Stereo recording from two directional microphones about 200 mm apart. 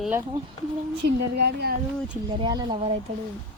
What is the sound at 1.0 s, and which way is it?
Speech, 55° right (ahead or behind).